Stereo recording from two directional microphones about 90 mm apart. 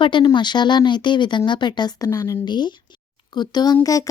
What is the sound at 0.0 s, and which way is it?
Speech, 60° left (ahead or behind).